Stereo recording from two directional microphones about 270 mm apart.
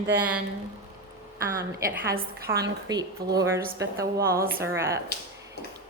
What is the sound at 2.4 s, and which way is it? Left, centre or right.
Speech, right.